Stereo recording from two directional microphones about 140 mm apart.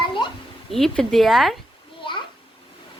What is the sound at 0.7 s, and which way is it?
Speech, centre (ahead or behind).